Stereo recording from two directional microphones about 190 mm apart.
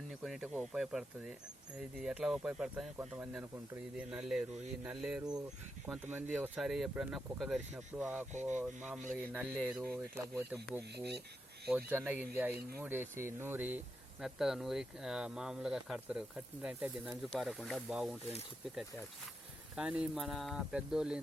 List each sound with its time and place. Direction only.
0.1 s speech: centre (ahead or behind)
8.3 s speech: 40° right (ahead or behind)
8.5 s speech: 5° right (ahead or behind)
10.9 s speech: 60° right (ahead or behind)
11.9 s speech: 10° right (ahead or behind)
17.2 s speech: 5° left (ahead or behind)
19.7 s speech: 5° right (ahead or behind)